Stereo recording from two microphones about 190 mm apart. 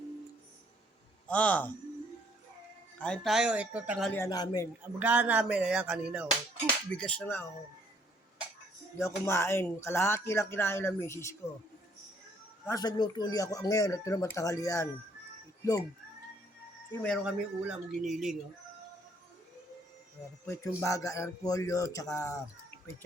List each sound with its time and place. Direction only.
1.3 s speech: 5° left (ahead or behind)
3.0 s speech: 5° left (ahead or behind)
4.1 s speech: 15° left (ahead or behind)
4.9 s music: 10° right (ahead or behind)
6.9 s speech: 5° left (ahead or behind)
9.0 s speech: 15° left (ahead or behind)
12.6 s speech: 20° left (ahead or behind)
16.9 s speech: 5° left (ahead or behind)
20.5 s speech: 15° left (ahead or behind)